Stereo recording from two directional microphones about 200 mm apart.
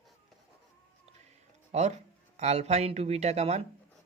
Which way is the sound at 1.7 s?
35° right (ahead or behind).